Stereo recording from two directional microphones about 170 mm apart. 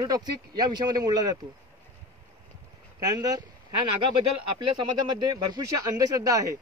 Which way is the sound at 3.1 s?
20° right (ahead or behind).